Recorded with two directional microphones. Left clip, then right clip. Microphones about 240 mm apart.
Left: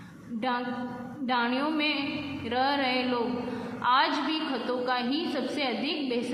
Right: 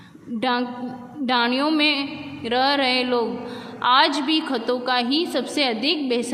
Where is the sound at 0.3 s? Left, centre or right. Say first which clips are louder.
Right 7 dB; right.